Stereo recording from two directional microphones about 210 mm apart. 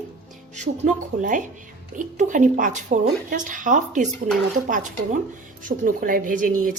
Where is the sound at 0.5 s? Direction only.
35° right (ahead or behind).